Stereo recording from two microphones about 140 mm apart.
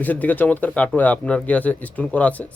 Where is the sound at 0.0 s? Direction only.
10° left (ahead or behind).